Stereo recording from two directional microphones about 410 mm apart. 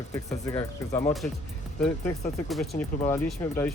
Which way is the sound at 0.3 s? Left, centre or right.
Centre.